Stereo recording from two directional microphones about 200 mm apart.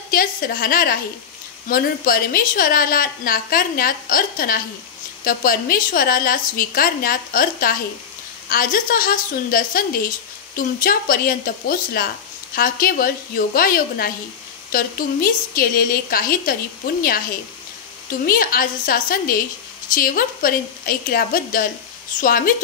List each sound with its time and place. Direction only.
0.1 s a woman's voice: 45° left (ahead or behind)
18.2 s a woman's voice: 45° left (ahead or behind)